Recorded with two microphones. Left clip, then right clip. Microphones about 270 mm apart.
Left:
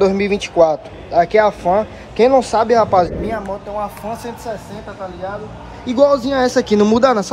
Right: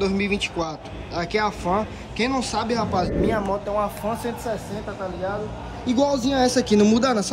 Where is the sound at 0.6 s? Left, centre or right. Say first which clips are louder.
Left 16 dB; centre.